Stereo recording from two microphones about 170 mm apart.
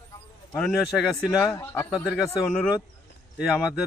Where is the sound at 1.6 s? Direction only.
15° left (ahead or behind).